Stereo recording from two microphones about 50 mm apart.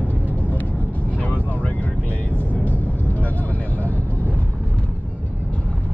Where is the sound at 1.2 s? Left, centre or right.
Left.